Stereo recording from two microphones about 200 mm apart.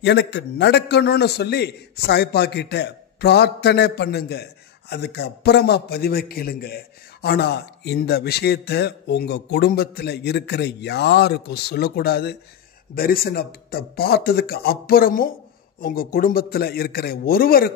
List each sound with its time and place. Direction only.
0.0 s a man's voice: 60° left (ahead or behind)